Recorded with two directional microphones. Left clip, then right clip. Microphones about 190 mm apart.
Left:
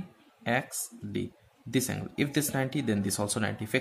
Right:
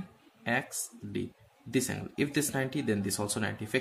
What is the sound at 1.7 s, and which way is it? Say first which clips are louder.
Speech: left 1 dB; 15° left (ahead or behind).